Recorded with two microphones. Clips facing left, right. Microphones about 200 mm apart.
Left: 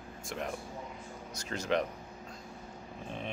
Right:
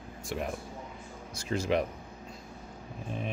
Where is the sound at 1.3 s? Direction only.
40° left (ahead or behind).